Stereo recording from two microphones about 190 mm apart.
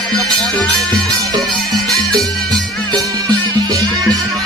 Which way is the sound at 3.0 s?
20° right (ahead or behind).